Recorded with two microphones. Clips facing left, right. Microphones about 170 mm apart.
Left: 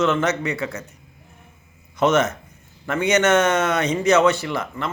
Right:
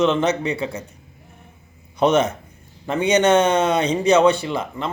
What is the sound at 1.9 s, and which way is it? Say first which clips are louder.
A man's voice: right 1 dB; 15° right (ahead or behind).